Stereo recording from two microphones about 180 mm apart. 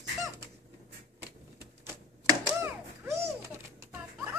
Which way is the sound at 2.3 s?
15° right (ahead or behind).